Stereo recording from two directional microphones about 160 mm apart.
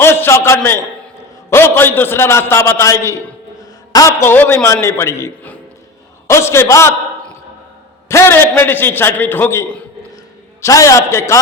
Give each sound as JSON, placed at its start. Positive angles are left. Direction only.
{"t": 0.0, "sound": "a sound", "side_deg": 15}
{"t": 1.5, "sound": "a man's voice", "side_deg": 15}
{"t": 8.0, "sound": "a man's voice", "side_deg": 15}